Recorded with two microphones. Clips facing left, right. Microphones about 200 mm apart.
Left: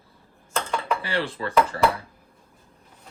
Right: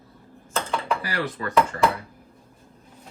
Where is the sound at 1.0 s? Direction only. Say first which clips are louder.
Left 1 dB; 30° left (ahead or behind).